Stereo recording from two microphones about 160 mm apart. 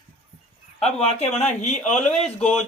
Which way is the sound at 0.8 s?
40° left (ahead or behind).